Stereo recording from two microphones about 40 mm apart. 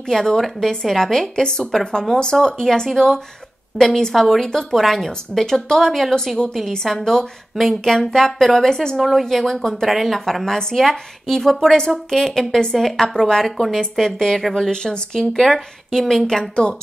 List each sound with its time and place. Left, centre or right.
0.0 s a woman's voice: centre
8.9 s speech: centre
9.2 s a woman's voice: centre
9.8 s speech: centre
10.2 s a woman's voice: centre
11.9 s a woman's voice: centre